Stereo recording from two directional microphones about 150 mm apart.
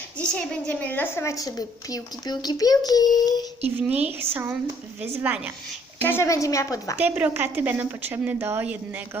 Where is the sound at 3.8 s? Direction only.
10° right (ahead or behind).